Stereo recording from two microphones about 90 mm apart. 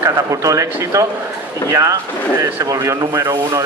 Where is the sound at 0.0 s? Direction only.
35° right (ahead or behind).